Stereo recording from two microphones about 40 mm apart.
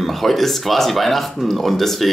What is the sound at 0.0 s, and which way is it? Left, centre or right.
Speech, centre.